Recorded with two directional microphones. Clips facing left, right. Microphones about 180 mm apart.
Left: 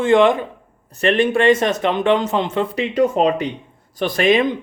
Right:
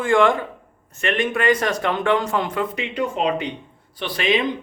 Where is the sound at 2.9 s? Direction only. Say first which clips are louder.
Left 6 dB; 40° left (ahead or behind).